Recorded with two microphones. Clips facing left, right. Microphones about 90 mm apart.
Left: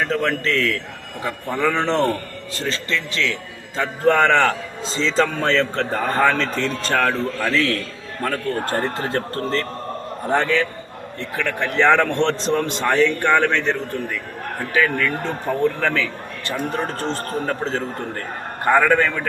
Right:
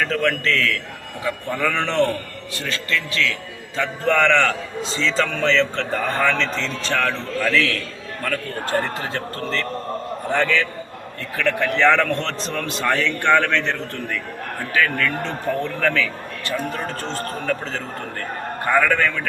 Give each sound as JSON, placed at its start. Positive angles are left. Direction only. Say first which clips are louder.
{"t": 0.0, "sound": "a man's voice", "louder": "even", "side_deg": 30}
{"t": 1.8, "sound": "a man's voice", "louder": "left 1 dB", "side_deg": 35}
{"t": 8.6, "sound": "a man's voice", "louder": "left 1 dB", "side_deg": 40}
{"t": 16.5, "sound": "a man's voice", "louder": "left 2 dB", "side_deg": 30}